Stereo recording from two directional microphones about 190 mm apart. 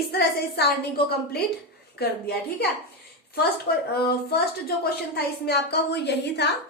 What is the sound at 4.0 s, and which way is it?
A woman's voice, 55° left (ahead or behind).